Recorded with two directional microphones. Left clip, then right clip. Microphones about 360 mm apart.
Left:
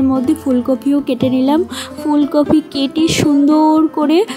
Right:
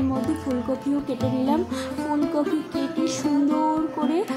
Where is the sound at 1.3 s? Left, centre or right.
Left.